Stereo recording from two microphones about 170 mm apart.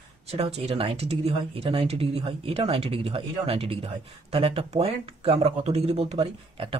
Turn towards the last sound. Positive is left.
turn(degrees=-35)  # may be behind; listen again after turning